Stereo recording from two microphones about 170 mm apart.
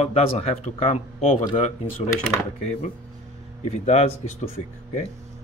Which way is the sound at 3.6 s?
40° left (ahead or behind).